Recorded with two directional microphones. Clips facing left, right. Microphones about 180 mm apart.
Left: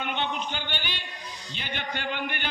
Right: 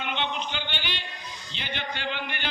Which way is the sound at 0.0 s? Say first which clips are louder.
Even; 45° left (ahead or behind).